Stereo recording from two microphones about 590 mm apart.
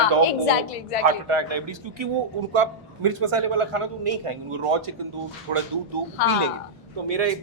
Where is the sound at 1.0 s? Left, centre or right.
Right.